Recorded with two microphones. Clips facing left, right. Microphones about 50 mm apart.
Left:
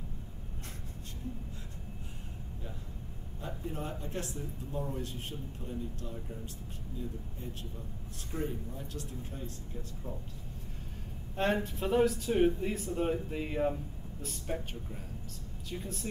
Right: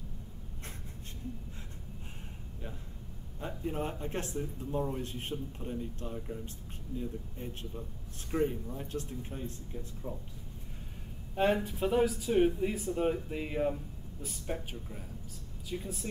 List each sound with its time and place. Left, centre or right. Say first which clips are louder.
3.3 s a man's voice: right 4 dB; right
11.3 s speech: right 2 dB; centre